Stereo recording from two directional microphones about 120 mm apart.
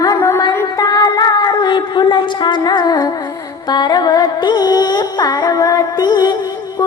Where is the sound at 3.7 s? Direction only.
35° left (ahead or behind).